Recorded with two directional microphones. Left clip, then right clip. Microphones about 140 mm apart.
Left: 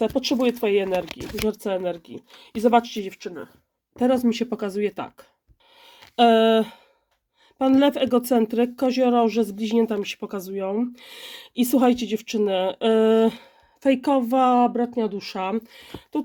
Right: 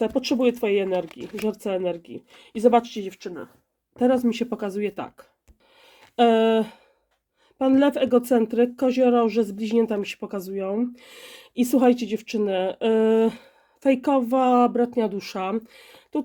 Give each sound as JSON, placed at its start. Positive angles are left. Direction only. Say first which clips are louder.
{"t": 0.0, "sound": "speech", "louder": "even", "side_deg": 20}
{"t": 5.8, "sound": "a sound", "louder": "left 2 dB", "side_deg": 20}
{"t": 7.6, "sound": "speech", "louder": "left 1 dB", "side_deg": 20}
{"t": 15.4, "sound": "speech", "louder": "left 1 dB", "side_deg": 15}